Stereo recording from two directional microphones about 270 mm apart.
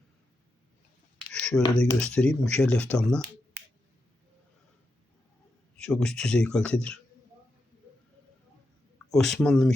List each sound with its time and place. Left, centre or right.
1.4 s a sound: centre
1.9 s speech: centre
5.7 s speech: centre
9.0 s speech: centre